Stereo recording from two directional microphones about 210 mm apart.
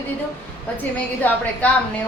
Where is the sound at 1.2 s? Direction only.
10° left (ahead or behind).